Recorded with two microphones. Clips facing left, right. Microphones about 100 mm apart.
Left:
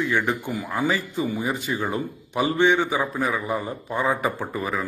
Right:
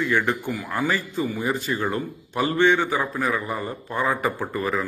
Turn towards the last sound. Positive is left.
turn(degrees=15)  # may be behind; listen again after turning